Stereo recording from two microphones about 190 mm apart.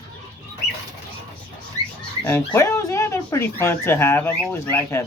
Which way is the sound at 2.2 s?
10° left (ahead or behind).